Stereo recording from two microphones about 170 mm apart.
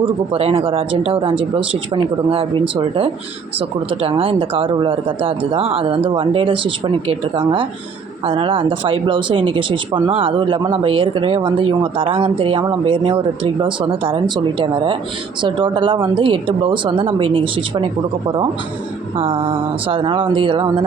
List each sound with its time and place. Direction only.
0.0 s speech: 35° right (ahead or behind)
3.8 s speech: 30° right (ahead or behind)
19.1 s speech: 30° right (ahead or behind)